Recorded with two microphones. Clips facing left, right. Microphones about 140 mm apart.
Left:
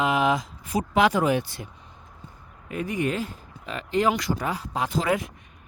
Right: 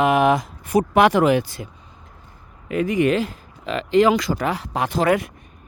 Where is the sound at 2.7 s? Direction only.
90° right; by 5.3 s 70° right (ahead or behind).